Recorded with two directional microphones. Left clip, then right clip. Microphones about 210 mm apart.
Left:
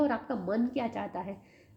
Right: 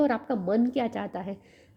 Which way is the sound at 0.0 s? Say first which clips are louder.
Right 4 dB; 50° right (ahead or behind).